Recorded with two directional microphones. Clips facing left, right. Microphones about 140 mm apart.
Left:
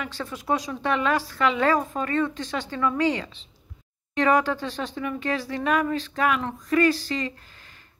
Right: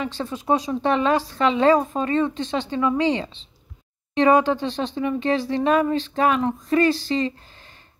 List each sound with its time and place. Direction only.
0.0 s a woman's voice: 25° right (ahead or behind)